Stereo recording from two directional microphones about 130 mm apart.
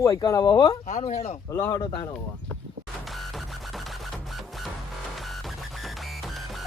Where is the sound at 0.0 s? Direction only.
25° left (ahead or behind).